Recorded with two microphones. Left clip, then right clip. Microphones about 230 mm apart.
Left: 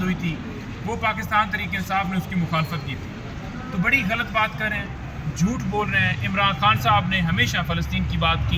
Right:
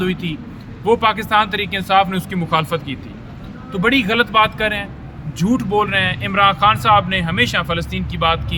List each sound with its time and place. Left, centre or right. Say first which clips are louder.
0.9 s speech: right 9 dB; right
3.8 s speech: right 6 dB; right